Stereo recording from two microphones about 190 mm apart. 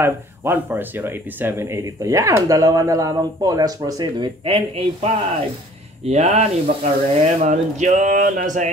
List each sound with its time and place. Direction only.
0.0 s a man's voice: 10° right (ahead or behind); by 8.6 s 45° right (ahead or behind)